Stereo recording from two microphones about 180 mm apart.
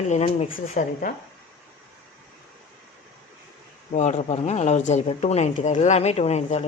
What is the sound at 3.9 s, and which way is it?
A woman's voice, 40° left (ahead or behind).